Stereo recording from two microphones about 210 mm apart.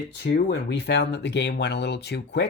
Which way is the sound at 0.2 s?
50° left (ahead or behind).